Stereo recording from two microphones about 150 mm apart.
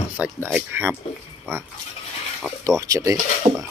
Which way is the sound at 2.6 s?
20° right (ahead or behind).